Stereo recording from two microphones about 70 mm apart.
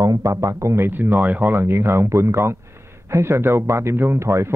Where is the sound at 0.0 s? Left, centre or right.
Right.